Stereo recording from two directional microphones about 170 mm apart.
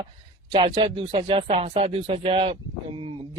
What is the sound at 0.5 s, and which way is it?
Speech, 30° right (ahead or behind).